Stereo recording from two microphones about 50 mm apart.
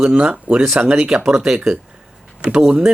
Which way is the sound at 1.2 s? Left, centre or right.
Centre.